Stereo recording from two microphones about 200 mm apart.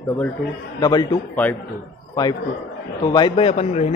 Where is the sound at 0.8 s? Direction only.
20° left (ahead or behind).